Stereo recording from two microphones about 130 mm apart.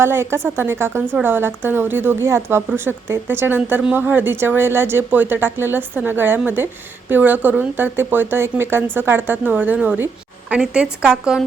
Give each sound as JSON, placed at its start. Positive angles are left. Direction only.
{"t": 0.0, "sound": "a woman's voice", "side_deg": -20}